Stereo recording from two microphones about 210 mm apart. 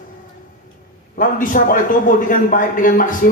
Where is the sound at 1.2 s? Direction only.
40° left (ahead or behind).